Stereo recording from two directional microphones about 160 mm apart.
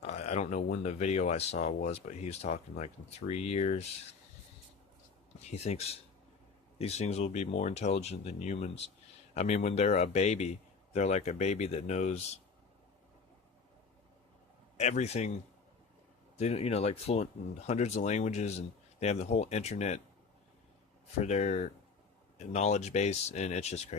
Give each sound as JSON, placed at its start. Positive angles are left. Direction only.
{"t": 0.0, "sound": "a sound", "side_deg": 45}
{"t": 0.8, "sound": "speech", "side_deg": 45}
{"t": 5.5, "sound": "speech", "side_deg": 40}
{"t": 14.8, "sound": "speech", "side_deg": 45}
{"t": 16.4, "sound": "speech", "side_deg": 40}
{"t": 21.2, "sound": "speech", "side_deg": 45}